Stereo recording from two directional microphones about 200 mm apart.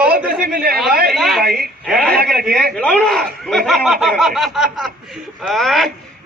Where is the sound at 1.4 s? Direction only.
50° right (ahead or behind).